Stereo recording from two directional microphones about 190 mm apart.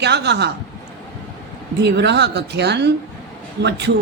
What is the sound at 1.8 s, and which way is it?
Speech, 65° right (ahead or behind).